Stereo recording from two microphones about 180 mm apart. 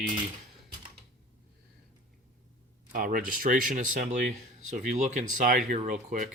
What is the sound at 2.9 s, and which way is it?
Speech, 50° right (ahead or behind).